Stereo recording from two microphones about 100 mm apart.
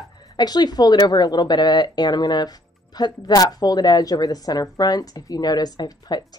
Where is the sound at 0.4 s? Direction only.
45° left (ahead or behind).